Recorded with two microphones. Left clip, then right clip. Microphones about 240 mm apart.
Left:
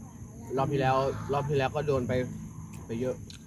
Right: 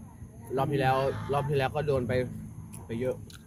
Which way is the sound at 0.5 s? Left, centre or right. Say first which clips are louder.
Even; centre.